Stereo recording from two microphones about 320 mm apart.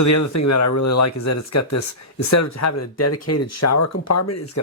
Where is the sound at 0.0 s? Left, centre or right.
Left.